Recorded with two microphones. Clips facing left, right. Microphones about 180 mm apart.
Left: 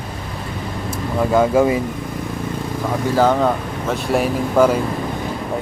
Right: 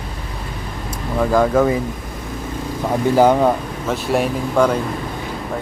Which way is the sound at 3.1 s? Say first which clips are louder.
Right 2 dB; 15° right (ahead or behind).